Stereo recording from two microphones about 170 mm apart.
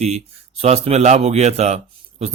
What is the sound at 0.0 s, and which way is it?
Speech, 40° right (ahead or behind).